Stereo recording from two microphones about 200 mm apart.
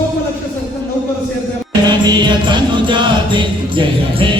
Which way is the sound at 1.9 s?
20° right (ahead or behind).